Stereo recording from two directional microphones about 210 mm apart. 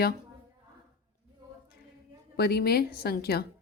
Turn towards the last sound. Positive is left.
turn(degrees=45)  # may be behind; listen again after turning